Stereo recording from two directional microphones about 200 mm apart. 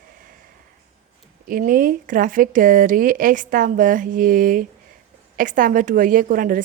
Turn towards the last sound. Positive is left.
turn(degrees=-45)  # may be behind; listen again after turning